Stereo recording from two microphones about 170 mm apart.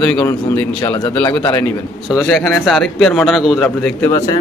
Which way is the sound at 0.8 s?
25° left (ahead or behind).